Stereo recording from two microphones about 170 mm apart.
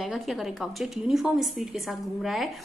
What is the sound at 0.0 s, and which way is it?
A woman's voice, centre (ahead or behind).